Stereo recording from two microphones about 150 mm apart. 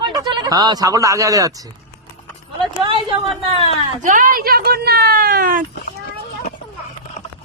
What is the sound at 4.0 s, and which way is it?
A woman's voice, 60° right (ahead or behind).